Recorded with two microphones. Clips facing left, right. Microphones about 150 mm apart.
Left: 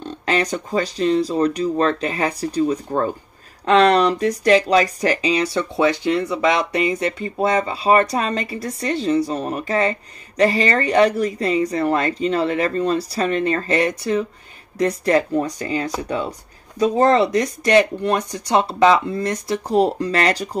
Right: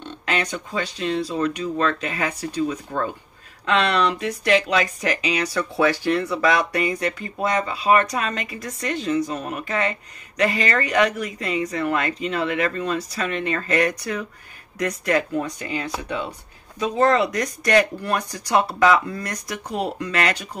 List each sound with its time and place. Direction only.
0.0 s speech: 35° left (ahead or behind)